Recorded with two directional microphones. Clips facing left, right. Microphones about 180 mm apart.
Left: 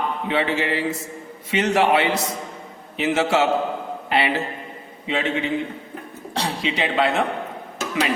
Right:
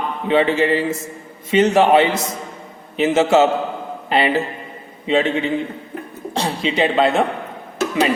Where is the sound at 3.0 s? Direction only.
25° right (ahead or behind).